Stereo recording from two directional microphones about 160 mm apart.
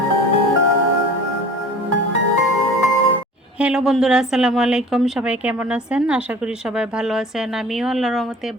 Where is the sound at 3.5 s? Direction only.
5° right (ahead or behind).